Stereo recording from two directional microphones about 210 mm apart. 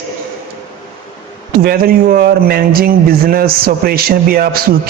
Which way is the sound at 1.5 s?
45° right (ahead or behind).